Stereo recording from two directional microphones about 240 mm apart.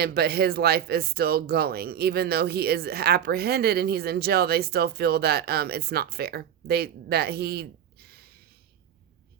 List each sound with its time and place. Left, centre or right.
0.0 s speech: right